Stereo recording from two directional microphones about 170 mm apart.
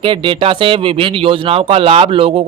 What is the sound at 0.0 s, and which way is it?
A man's voice, 30° right (ahead or behind).